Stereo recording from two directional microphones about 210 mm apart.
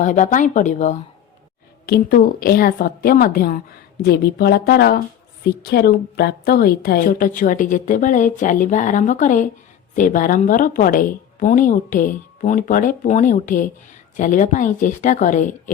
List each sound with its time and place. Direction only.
0.0 s a woman's voice: 35° left (ahead or behind)